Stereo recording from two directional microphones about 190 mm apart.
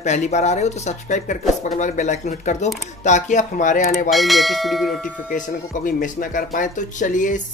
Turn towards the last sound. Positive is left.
turn(degrees=40)  # may be behind; listen again after turning